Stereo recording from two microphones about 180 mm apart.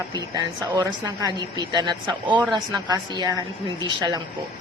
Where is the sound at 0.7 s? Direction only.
20° right (ahead or behind).